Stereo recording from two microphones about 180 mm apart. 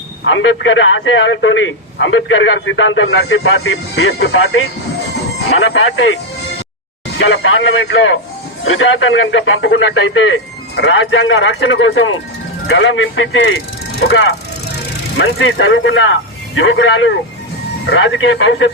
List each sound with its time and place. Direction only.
0.3 s a man's voice: 90° left
7.2 s a man's voice: 90° left